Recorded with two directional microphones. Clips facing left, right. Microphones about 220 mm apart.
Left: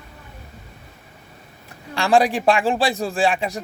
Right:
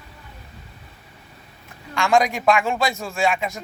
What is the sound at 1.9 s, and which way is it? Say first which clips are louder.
A man's voice: left 2 dB; 35° left (ahead or behind).